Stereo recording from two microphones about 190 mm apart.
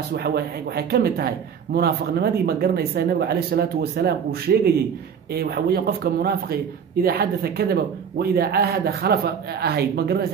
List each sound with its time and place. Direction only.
0.1 s speech: 55° right (ahead or behind)